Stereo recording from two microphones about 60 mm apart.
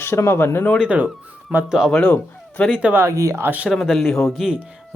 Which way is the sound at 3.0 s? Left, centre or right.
Right.